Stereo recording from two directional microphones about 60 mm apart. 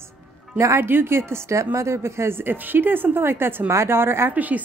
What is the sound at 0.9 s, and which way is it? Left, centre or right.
Speech, right.